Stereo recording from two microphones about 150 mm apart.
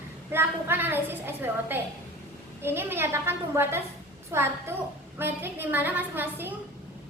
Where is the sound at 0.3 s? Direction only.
15° right (ahead or behind).